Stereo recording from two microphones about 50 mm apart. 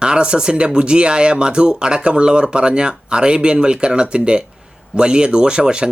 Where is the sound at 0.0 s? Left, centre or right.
Centre.